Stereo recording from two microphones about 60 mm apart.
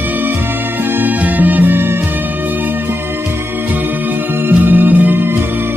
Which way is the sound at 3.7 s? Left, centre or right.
Right.